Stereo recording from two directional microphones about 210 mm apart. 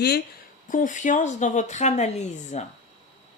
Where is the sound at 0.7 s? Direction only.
40° left (ahead or behind).